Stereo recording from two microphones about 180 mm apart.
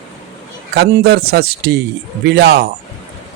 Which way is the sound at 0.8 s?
65° right (ahead or behind).